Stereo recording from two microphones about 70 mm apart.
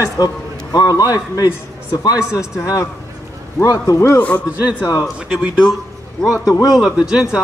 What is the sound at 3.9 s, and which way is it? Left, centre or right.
Speech, left.